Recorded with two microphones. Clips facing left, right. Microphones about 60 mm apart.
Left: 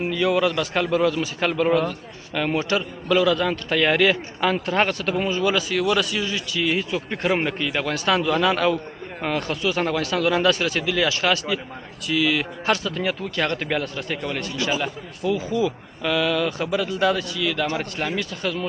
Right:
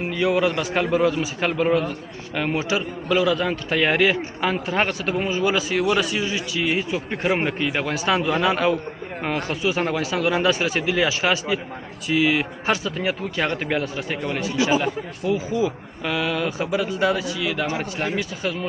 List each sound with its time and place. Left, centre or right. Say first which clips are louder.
0.1 s a man's voice: right 1 dB; centre